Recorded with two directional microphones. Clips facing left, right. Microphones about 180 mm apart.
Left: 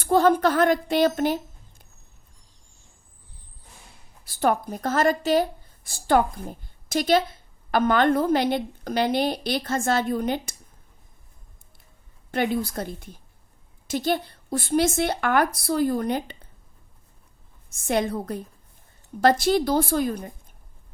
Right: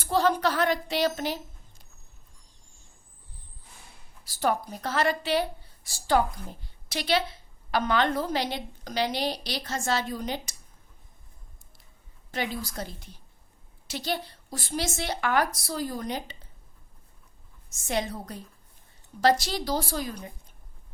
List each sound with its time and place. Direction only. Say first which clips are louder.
0.0 s speech: left 6 dB; 50° left (ahead or behind)
4.2 s speech: left 4 dB; 55° left (ahead or behind)
12.3 s speech: left 8 dB; 55° left (ahead or behind)
17.7 s speech: left 6 dB; 55° left (ahead or behind)